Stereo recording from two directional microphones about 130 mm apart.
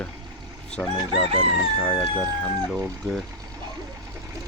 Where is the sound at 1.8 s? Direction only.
15° left (ahead or behind).